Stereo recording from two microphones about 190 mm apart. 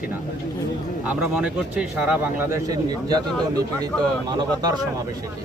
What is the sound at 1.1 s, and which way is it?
Speech, 5° right (ahead or behind).